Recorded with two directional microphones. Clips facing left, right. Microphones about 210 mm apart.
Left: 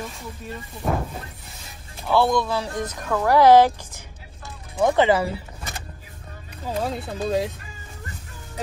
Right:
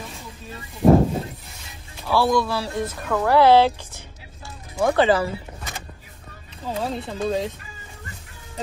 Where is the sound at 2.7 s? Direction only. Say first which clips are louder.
Right 1 dB; centre (ahead or behind).